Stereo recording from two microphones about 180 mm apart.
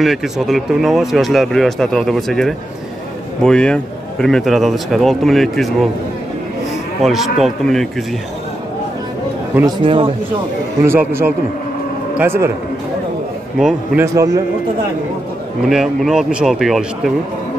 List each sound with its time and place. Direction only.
0.0 s speech: centre (ahead or behind)
7.0 s speech: centre (ahead or behind)
9.5 s a man's voice: 10° right (ahead or behind)
9.8 s speech: 30° right (ahead or behind)
10.8 s a man's voice: 15° right (ahead or behind)
13.6 s speech: centre (ahead or behind)
14.0 s a man's voice: 15° right (ahead or behind)
15.6 s speech: centre (ahead or behind)